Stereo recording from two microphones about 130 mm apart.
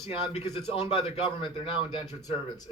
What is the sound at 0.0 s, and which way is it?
Speech, 50° left (ahead or behind).